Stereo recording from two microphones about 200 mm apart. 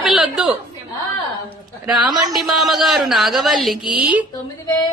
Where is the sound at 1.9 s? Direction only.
20° right (ahead or behind).